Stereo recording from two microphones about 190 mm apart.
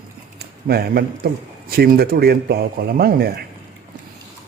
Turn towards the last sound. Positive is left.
turn(degrees=-55)  # may be behind; listen again after turning